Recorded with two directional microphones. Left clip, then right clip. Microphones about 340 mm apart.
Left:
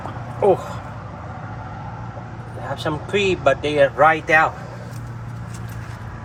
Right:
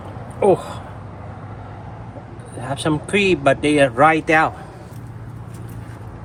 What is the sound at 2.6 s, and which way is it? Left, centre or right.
Speech, right.